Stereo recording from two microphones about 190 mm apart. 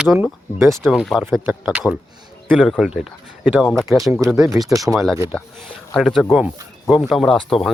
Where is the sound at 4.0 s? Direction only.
15° right (ahead or behind).